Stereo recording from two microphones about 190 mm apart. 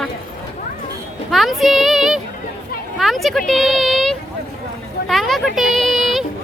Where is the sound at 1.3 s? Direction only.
Centre (ahead or behind).